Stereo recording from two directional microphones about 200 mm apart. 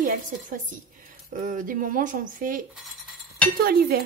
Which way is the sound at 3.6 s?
50° right (ahead or behind).